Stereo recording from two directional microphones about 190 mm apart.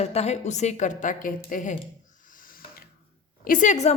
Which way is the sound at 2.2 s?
45° left (ahead or behind).